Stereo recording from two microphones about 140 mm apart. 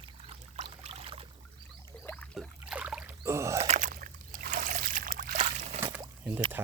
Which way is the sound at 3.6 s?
55° right (ahead or behind).